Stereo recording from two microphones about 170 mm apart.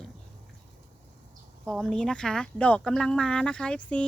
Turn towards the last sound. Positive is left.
turn(degrees=5)  # may be behind; listen again after turning